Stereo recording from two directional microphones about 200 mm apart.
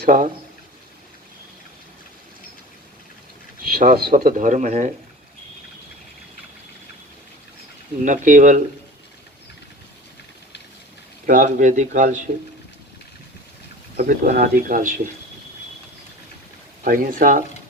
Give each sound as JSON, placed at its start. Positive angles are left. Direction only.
{"t": 0.0, "sound": "speech", "side_deg": -45}
{"t": 3.7, "sound": "speech", "side_deg": -50}
{"t": 8.0, "sound": "speech", "side_deg": -40}
{"t": 11.3, "sound": "speech", "side_deg": -40}
{"t": 13.9, "sound": "speech", "side_deg": -50}
{"t": 16.8, "sound": "speech", "side_deg": -45}